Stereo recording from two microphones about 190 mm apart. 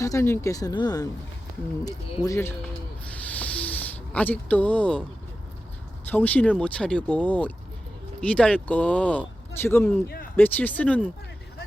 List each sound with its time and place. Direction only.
0.0 s speech: 15° left (ahead or behind)
3.2 s a sound: 10° left (ahead or behind)
6.1 s speech: 10° left (ahead or behind)